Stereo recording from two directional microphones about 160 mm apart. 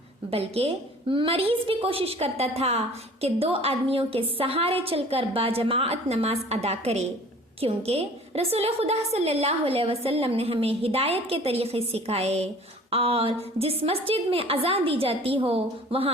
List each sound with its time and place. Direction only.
0.3 s a woman's voice: 40° right (ahead or behind)